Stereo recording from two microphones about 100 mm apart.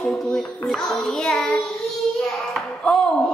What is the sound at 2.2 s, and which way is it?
Hands, 5° left (ahead or behind).